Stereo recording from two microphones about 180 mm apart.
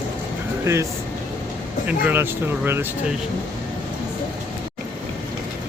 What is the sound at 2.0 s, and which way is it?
Speech, 10° right (ahead or behind).